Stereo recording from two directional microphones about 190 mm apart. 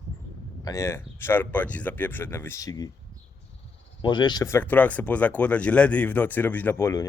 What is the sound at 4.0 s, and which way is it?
Speech, 25° left (ahead or behind).